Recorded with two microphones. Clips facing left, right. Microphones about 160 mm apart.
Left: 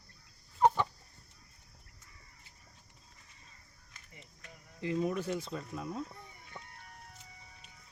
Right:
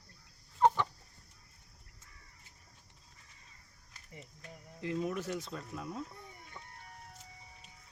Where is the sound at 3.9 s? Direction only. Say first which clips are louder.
Right 5 dB; 35° right (ahead or behind).